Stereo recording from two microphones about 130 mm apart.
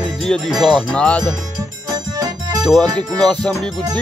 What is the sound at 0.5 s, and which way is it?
Music, 35° right (ahead or behind).